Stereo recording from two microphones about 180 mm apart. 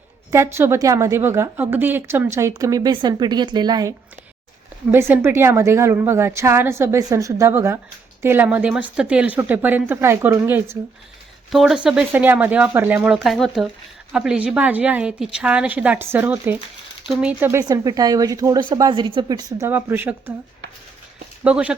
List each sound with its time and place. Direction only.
0.3 s a woman's voice: 15° right (ahead or behind)
11.5 s a woman's voice: centre (ahead or behind)
21.4 s a woman's voice: 5° right (ahead or behind)